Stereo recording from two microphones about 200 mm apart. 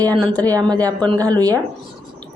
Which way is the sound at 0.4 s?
20° right (ahead or behind).